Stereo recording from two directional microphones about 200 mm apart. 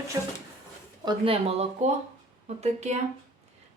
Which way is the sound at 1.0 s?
30° right (ahead or behind).